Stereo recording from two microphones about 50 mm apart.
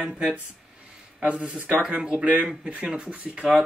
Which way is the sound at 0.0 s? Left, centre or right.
Centre.